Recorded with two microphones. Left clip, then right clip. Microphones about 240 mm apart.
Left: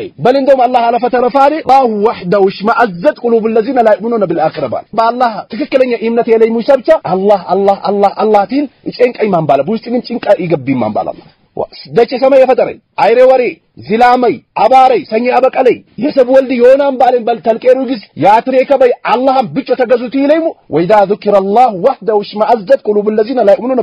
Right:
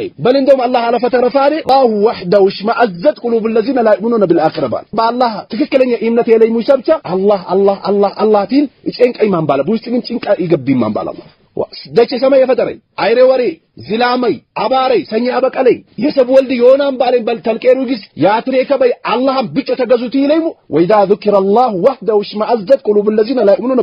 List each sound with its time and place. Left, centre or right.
0.2 s speech: left
3.3 s speech: left
12.2 s speech: left